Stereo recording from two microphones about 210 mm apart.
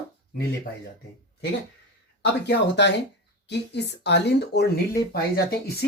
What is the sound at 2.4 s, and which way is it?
Speech, 55° left (ahead or behind).